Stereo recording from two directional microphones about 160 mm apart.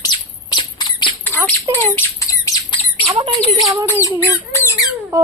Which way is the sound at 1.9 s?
20° left (ahead or behind).